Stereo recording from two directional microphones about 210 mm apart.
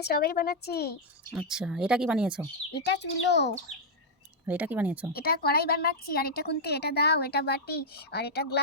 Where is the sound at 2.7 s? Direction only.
55° left (ahead or behind).